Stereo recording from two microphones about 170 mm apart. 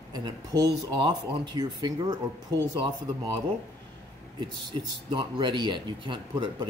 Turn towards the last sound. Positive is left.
turn(degrees=-25)  # may be behind; listen again after turning